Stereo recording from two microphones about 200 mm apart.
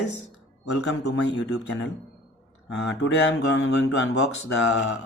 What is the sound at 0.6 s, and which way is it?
Speech, 60° left (ahead or behind).